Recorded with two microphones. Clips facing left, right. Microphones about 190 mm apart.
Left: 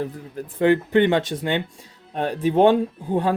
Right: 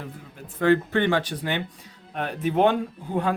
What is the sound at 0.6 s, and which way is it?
Speech, 15° left (ahead or behind).